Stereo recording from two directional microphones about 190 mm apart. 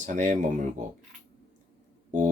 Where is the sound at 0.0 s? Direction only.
40° right (ahead or behind).